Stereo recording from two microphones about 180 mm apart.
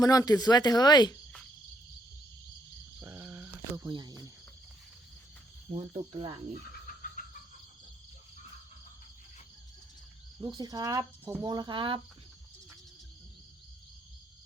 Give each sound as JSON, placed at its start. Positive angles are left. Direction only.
{"t": 0.0, "sound": "speech", "side_deg": 20}
{"t": 3.0, "sound": "a sound", "side_deg": -15}
{"t": 3.8, "sound": "speech", "side_deg": -25}
{"t": 5.7, "sound": "cricket", "side_deg": -35}
{"t": 6.1, "sound": "speech", "side_deg": -25}
{"t": 6.8, "sound": "a sound", "side_deg": 50}
{"t": 10.4, "sound": "speech", "side_deg": -20}